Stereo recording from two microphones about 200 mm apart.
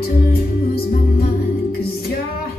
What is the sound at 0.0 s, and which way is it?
Music, 50° left (ahead or behind).